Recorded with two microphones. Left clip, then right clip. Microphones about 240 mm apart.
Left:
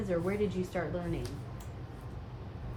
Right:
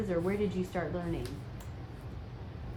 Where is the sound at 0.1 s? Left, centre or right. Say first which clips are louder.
Left 1 dB; right.